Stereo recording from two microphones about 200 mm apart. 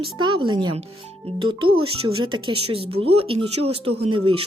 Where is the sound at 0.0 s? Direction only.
25° right (ahead or behind).